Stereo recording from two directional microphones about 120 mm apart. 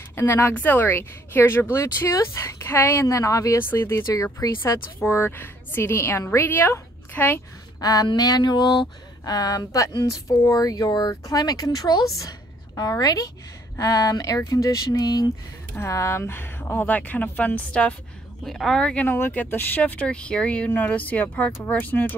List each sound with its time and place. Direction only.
0.1 s speech: 20° left (ahead or behind)
7.8 s a woman's voice: 30° left (ahead or behind)
15.7 s speech: 20° left (ahead or behind)